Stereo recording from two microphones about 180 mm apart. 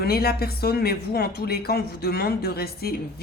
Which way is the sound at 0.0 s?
60° left (ahead or behind).